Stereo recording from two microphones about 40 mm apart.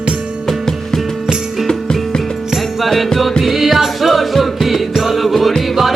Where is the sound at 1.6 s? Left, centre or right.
Centre.